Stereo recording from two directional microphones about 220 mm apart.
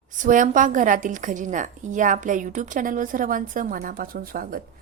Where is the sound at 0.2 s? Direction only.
35° right (ahead or behind).